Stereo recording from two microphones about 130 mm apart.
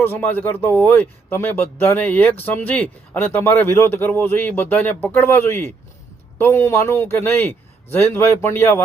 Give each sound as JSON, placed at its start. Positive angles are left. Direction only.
{"t": 0.0, "sound": "a man's voice", "side_deg": 15}